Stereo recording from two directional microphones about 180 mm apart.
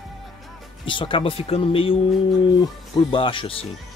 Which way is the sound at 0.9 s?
30° left (ahead or behind).